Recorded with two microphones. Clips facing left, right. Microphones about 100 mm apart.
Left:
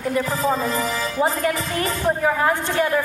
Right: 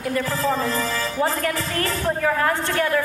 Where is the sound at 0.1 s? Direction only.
20° left (ahead or behind).